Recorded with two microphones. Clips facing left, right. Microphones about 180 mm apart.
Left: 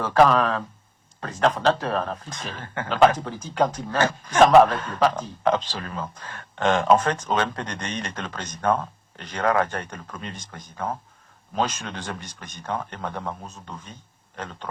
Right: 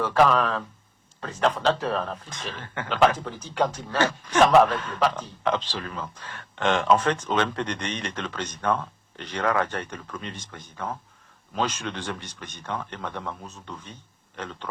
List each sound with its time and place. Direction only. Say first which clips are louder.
0.0 s a man's voice: left 2 dB; 40° left (ahead or behind)